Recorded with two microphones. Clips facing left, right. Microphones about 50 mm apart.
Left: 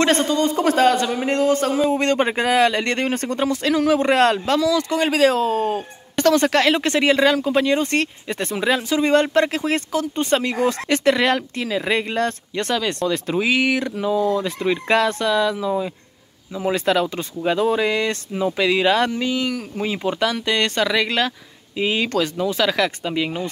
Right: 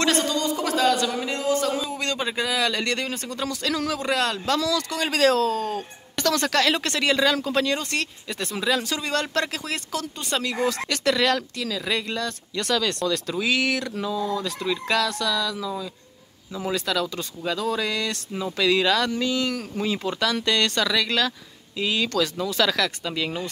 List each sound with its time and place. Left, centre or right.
0.0 s a man's voice: left
3.4 s speech: left
4.0 s a man's voice: left
4.5 s speech: centre
5.5 s a man's voice: left
14.0 s a man's voice: left